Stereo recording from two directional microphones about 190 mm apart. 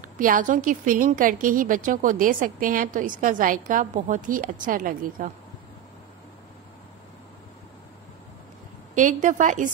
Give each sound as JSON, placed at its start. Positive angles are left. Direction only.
{"t": 0.2, "sound": "a woman's voice", "side_deg": -45}
{"t": 8.9, "sound": "a woman's voice", "side_deg": -40}